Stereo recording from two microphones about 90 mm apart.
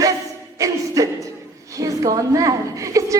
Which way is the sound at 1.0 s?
40° right (ahead or behind).